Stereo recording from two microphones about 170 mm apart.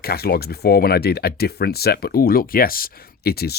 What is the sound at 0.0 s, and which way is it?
Speech, 65° left (ahead or behind).